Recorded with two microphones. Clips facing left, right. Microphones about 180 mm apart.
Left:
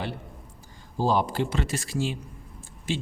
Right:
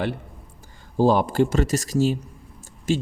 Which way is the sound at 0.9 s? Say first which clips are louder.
Right 6 dB; 50° right (ahead or behind).